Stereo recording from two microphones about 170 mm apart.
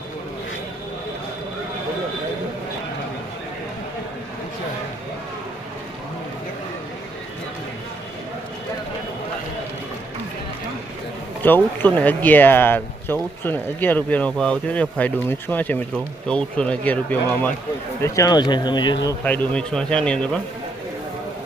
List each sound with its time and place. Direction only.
11.4 s speech: 10° left (ahead or behind)
19.2 s speech: 10° left (ahead or behind)